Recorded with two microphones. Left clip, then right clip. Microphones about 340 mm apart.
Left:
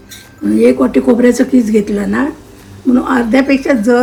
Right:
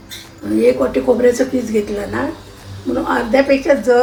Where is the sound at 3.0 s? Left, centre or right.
Left.